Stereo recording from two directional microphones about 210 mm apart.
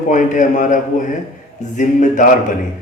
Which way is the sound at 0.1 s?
35° left (ahead or behind).